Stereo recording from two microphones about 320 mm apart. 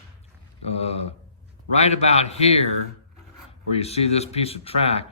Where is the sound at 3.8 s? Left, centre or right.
Centre.